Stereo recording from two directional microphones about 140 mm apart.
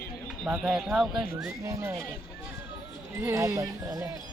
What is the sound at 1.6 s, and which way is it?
Speech, 25° right (ahead or behind).